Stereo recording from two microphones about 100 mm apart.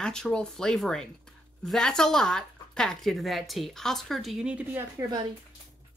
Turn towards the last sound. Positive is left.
turn(degrees=-25)  # may be behind; listen again after turning